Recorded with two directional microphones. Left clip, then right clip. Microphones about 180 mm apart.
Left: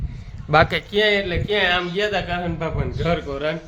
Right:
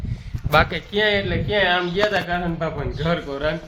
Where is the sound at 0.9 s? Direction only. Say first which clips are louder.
Left 1 dB; 10° left (ahead or behind).